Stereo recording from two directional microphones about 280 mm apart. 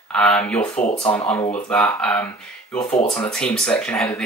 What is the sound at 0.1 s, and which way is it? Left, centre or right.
Speech, centre.